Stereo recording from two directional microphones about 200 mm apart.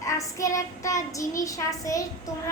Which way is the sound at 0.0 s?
15° left (ahead or behind).